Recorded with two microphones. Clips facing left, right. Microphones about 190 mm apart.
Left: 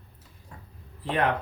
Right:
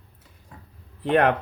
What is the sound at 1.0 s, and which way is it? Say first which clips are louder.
Speech: right 7 dB; 65° right (ahead or behind).